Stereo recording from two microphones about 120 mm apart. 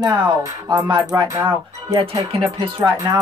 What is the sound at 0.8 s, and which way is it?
Speech, 35° right (ahead or behind).